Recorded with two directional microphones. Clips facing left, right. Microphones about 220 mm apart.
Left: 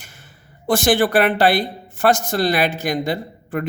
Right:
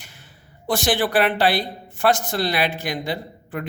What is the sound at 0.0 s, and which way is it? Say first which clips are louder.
Speech: left 1 dB; 45° left (ahead or behind).